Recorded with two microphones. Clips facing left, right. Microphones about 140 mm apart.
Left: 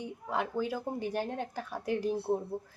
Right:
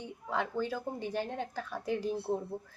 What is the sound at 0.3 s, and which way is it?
A woman's voice, 10° left (ahead or behind).